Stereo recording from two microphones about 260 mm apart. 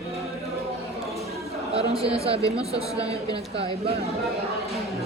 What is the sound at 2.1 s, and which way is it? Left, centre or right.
Speech, right.